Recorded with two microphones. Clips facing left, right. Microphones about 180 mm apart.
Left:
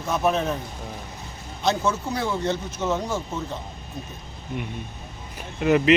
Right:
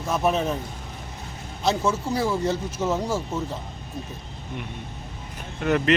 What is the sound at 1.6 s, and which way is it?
Speech, 5° right (ahead or behind).